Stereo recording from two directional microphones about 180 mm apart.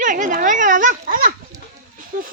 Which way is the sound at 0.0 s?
45° right (ahead or behind).